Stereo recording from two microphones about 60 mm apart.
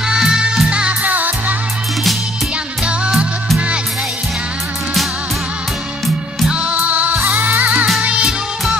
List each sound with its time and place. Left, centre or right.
0.1 s music: centre
1.0 s music: right
6.5 s music: right
8.0 s music of bollywood: centre